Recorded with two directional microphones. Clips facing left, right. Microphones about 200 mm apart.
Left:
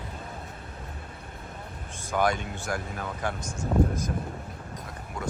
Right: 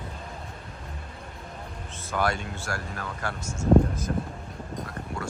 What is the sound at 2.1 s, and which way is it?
Speech, 15° left (ahead or behind).